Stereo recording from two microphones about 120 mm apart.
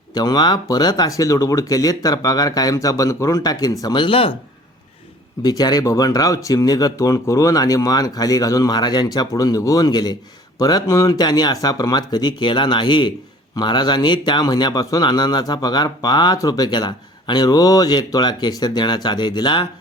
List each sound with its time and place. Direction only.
0.1 s a man's voice: 35° left (ahead or behind); by 4.4 s 50° left (ahead or behind)
5.4 s a man's voice: 35° left (ahead or behind)